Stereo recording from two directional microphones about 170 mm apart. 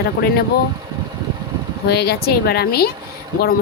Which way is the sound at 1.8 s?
70° left (ahead or behind).